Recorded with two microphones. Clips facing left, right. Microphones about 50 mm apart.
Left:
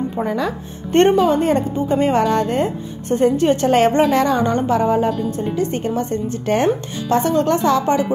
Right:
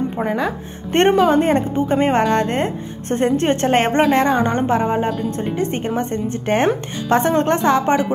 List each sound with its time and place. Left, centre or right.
0.2 s a woman's voice: right